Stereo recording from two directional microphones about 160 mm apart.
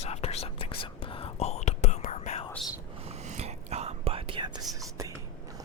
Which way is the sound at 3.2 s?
45° right (ahead or behind).